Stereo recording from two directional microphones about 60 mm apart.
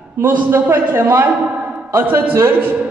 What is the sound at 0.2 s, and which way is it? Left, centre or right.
A woman's voice, right.